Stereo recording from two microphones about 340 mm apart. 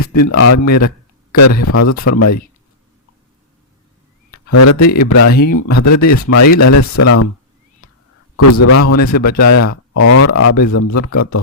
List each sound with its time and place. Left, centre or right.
0.0 s speech: left
0.7 s a sound: left
1.6 s speech: left
4.3 s a sound: left
4.9 s speech: left
6.9 s speech: left
8.4 s speech: left